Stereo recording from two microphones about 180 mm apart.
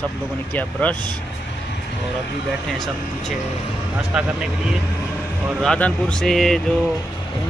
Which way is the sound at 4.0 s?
5° right (ahead or behind).